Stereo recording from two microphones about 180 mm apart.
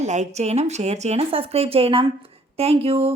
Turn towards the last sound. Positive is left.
turn(degrees=-35)  # may be behind; listen again after turning